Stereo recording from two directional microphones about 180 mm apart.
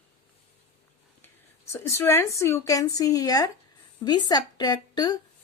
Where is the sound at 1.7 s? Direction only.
15° left (ahead or behind).